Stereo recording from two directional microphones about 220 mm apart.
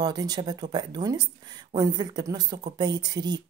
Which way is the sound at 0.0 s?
20° right (ahead or behind).